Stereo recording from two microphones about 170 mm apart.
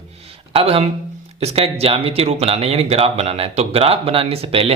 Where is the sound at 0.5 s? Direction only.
35° right (ahead or behind).